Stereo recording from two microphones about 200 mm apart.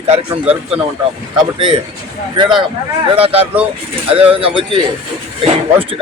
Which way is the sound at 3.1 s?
30° right (ahead or behind).